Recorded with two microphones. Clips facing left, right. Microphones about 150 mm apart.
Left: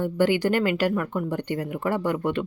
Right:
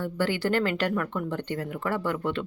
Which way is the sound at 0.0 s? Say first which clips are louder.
Left 5 dB; 15° left (ahead or behind).